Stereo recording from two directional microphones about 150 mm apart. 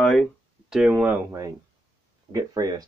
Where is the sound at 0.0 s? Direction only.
Centre (ahead or behind).